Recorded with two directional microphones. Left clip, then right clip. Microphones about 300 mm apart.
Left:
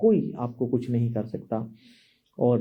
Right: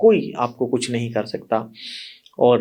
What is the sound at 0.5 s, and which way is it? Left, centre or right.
Speech, right.